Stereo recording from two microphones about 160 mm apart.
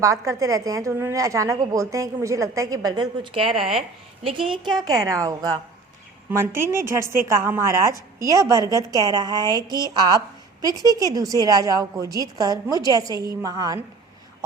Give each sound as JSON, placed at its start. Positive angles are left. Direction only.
{"t": 0.0, "sound": "a woman's voice", "side_deg": -20}